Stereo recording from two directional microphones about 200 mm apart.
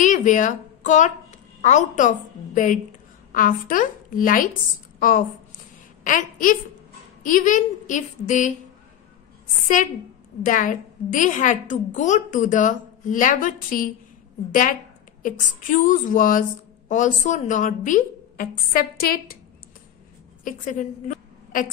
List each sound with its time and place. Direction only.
0.0 s a woman's voice: 40° left (ahead or behind)
6.0 s a woman's voice: 40° left (ahead or behind)
10.4 s a woman's voice: 40° left (ahead or behind)
20.4 s a woman's voice: 40° left (ahead or behind)